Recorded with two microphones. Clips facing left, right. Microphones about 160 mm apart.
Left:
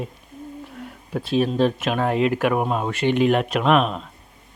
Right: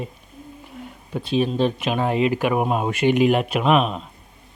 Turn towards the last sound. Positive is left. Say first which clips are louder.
# even
turn(degrees=0)  # may be behind; listen again after turning